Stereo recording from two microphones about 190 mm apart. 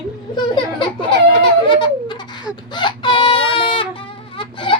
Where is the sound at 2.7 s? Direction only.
25° left (ahead or behind).